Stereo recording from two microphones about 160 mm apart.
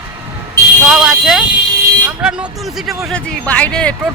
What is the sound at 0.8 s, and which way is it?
Speech, centre (ahead or behind).